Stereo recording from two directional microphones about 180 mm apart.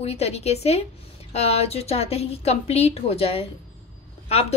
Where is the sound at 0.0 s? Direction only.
35° left (ahead or behind).